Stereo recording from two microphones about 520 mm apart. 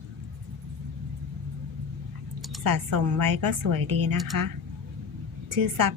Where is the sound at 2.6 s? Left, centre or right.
Right.